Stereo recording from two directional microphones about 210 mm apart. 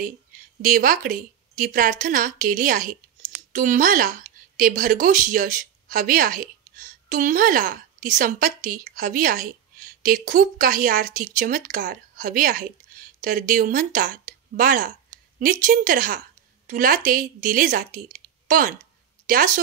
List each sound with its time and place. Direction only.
0.6 s a woman's voice: 40° right (ahead or behind)